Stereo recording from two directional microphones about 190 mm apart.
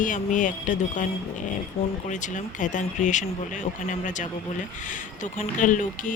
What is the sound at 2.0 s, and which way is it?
Speech, 40° left (ahead or behind).